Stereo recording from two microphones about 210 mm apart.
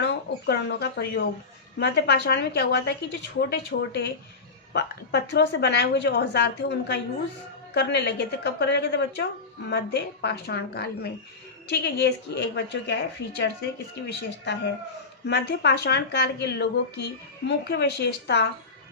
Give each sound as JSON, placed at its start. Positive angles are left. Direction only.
{"t": 0.0, "sound": "a woman's voice", "side_deg": 50}